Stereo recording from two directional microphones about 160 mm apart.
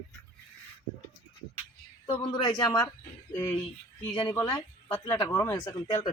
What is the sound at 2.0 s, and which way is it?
Speech, 25° left (ahead or behind).